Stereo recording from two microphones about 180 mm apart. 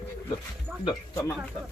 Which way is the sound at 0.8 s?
20° left (ahead or behind).